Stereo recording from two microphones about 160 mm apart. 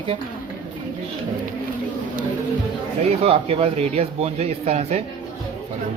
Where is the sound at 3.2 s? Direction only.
35° right (ahead or behind).